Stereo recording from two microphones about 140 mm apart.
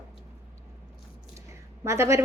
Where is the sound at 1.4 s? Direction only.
20° right (ahead or behind).